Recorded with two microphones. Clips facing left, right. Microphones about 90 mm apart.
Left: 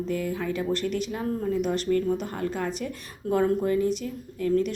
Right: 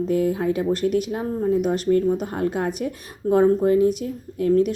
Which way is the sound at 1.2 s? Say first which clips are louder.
Right 5 dB; 35° right (ahead or behind).